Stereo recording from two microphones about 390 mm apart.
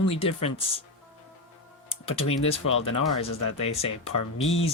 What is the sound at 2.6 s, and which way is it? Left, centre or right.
Speech, left.